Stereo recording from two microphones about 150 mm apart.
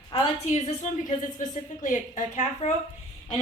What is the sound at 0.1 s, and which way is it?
Speech, 45° left (ahead or behind).